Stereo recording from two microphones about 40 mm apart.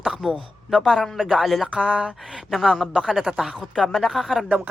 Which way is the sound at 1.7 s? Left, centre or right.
Right.